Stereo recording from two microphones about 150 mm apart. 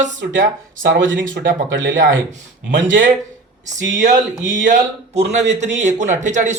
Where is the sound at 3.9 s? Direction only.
55° right (ahead or behind).